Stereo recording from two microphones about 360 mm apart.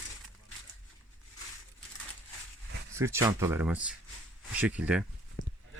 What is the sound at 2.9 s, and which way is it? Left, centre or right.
Speech, centre.